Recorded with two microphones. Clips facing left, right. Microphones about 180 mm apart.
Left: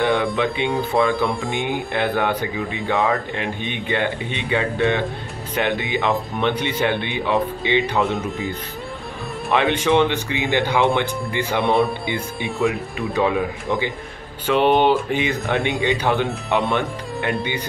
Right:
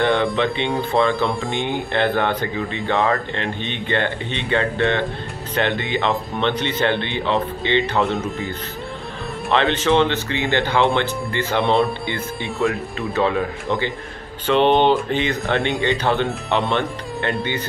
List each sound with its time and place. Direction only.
0.0 s speech: centre (ahead or behind)
8.0 s speech: centre (ahead or behind)
9.5 s speech: 10° left (ahead or behind)
12.4 s speech: centre (ahead or behind)
13.1 s speech: 10° left (ahead or behind)
16.0 s speech: 15° left (ahead or behind)
16.3 s speech: centre (ahead or behind)